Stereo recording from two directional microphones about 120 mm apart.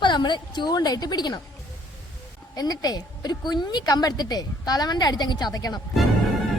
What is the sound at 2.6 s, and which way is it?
Speech, 35° left (ahead or behind).